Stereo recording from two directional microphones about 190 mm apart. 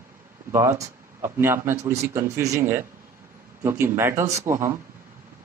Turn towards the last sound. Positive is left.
turn(degrees=-15)  # may be behind; listen again after turning